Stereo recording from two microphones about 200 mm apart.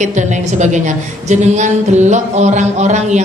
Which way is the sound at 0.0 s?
35° right (ahead or behind).